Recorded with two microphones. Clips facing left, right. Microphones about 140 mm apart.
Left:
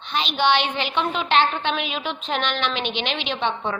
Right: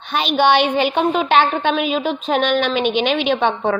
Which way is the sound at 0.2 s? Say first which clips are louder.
Right 6 dB; 50° right (ahead or behind).